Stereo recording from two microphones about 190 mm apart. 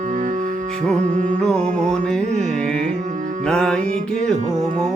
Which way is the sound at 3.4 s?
5° left (ahead or behind).